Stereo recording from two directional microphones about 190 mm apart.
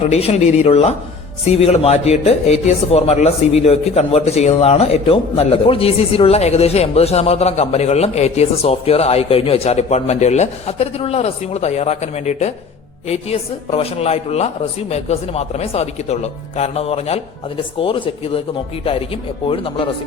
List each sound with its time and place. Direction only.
0.0 s speech: 30° left (ahead or behind)